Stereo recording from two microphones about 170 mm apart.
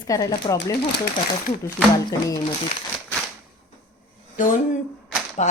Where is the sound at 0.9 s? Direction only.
75° left (ahead or behind).